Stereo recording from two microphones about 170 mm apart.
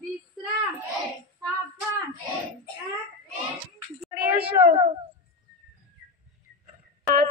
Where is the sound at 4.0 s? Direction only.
10° right (ahead or behind).